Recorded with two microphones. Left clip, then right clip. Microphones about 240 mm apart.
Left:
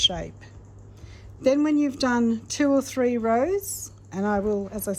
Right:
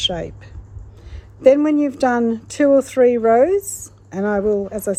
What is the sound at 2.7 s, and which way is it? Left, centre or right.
Speech, right.